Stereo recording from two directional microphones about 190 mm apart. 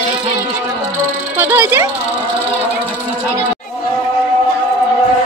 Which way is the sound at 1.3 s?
10° right (ahead or behind).